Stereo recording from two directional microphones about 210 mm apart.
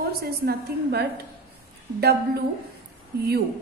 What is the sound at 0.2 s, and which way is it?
Speech, 50° right (ahead or behind).